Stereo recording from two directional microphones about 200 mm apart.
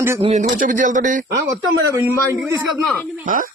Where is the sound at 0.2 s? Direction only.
35° right (ahead or behind).